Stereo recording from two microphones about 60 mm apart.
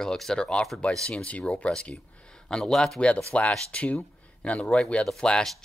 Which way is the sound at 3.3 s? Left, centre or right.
Centre.